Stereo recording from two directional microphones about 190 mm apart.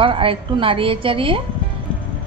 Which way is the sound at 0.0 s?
30° right (ahead or behind).